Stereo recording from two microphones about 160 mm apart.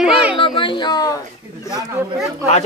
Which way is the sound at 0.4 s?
30° left (ahead or behind).